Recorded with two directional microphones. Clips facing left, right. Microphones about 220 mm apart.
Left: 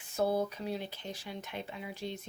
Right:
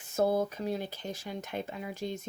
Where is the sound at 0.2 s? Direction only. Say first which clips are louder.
Right 3 dB; 45° right (ahead or behind).